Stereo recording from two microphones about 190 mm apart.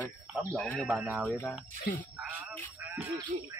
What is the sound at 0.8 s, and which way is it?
Speech, 10° right (ahead or behind).